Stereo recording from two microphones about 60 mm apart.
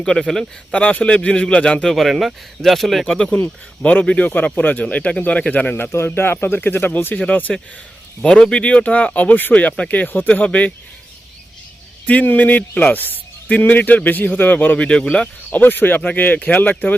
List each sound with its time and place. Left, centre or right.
0.0 s a man's voice: centre
0.8 s a man's voice: left; by 3.0 s centre
3.1 s a man's voice: centre
5.9 s speech: left
8.2 s speech: centre
12.0 s speech: left
15.5 s speech: left